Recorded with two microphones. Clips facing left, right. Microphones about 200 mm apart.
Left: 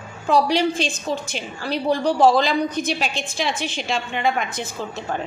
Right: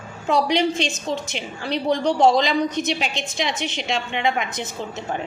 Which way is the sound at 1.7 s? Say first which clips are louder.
Even; 10° left (ahead or behind).